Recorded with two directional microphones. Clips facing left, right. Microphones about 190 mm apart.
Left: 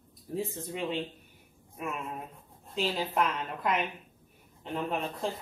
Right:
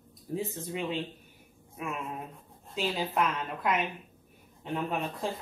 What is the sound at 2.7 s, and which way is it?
Speech, centre (ahead or behind).